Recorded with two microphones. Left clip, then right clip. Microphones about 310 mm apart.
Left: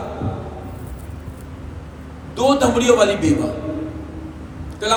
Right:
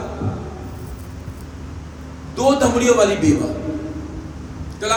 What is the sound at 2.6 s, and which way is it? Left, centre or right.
Speech, centre.